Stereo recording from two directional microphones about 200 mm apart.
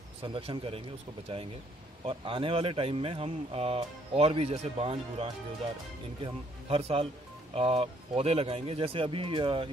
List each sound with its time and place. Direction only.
0.2 s speech: 25° right (ahead or behind)